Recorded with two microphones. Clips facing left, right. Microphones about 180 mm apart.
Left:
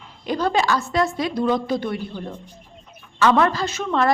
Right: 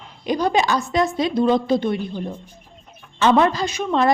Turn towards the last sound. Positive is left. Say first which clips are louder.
# right 2 dB
turn(degrees=-20)  # may be behind; listen again after turning